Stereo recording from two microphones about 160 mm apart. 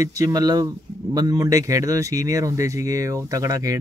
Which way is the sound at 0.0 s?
20° right (ahead or behind).